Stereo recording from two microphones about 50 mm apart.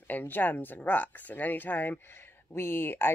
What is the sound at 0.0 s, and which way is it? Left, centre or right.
Speech, left.